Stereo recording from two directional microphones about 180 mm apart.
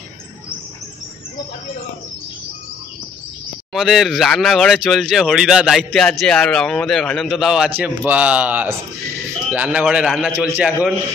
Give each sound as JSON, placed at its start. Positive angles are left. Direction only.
{"t": 3.7, "sound": "a man's voice", "side_deg": 0}